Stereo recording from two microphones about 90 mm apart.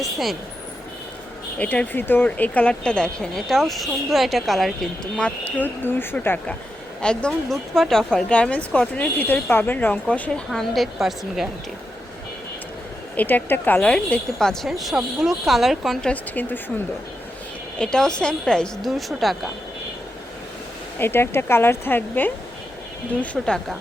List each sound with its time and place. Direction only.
0.0 s a woman's voice: centre (ahead or behind)
1.5 s speech: 15° left (ahead or behind); by 11.4 s 5° right (ahead or behind)
13.1 s a woman's voice: 20° left (ahead or behind); by 16.0 s centre (ahead or behind)
16.0 s speech: 15° left (ahead or behind)
17.7 s speech: 10° left (ahead or behind)
21.0 s speech: 25° left (ahead or behind)